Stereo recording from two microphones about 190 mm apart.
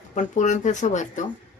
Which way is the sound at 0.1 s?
40° left (ahead or behind).